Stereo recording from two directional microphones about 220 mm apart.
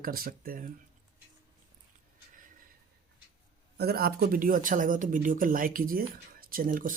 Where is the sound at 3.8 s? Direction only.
45° right (ahead or behind).